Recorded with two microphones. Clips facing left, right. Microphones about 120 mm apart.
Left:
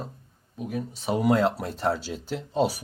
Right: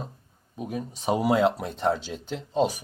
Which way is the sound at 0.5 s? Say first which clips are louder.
Left 1 dB; 20° right (ahead or behind).